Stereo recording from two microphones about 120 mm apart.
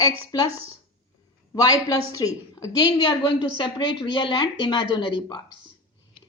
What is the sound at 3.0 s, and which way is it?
A woman's voice, 40° left (ahead or behind).